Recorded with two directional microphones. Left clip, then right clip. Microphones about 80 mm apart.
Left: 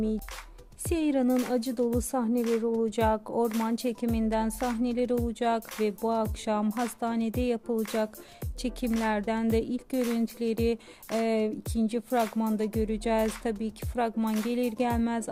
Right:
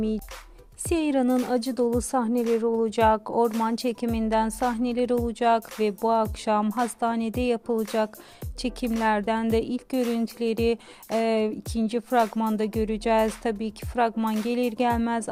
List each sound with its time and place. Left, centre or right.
0.9 s speech: right
9.0 s speech: right